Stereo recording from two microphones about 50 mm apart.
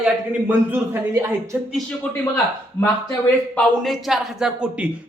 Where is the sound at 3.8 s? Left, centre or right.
Centre.